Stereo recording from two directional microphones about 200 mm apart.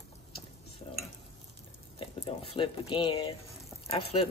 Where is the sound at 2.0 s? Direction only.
30° left (ahead or behind).